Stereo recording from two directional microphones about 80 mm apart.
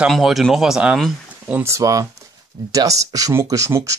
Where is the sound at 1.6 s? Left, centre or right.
Right.